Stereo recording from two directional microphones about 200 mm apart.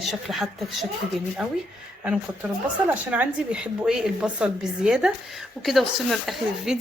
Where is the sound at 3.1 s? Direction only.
5° right (ahead or behind).